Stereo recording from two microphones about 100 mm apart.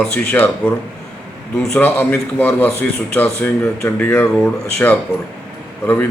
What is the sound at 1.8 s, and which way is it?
A man's voice, 20° left (ahead or behind).